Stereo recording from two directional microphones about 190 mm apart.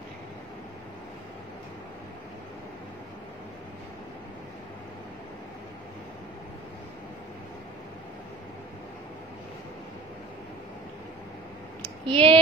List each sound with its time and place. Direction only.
12.1 s speech: 30° right (ahead or behind)